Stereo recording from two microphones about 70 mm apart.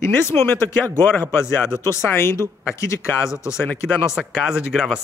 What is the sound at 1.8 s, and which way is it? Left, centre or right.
Speech, left.